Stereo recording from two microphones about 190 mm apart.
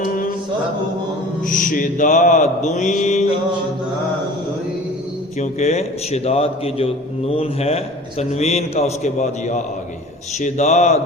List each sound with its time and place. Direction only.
0.0 s music: 45° left (ahead or behind)
1.5 s a man's voice: 45° left (ahead or behind)
5.4 s a man's voice: 35° left (ahead or behind)